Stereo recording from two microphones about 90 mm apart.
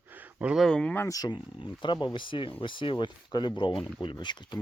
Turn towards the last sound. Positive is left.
turn(degrees=60)  # may be behind; listen again after turning